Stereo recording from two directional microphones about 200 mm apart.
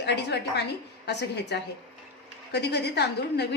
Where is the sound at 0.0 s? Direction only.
55° left (ahead or behind).